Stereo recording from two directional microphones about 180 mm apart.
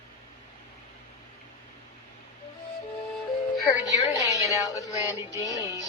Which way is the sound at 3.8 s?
20° left (ahead or behind).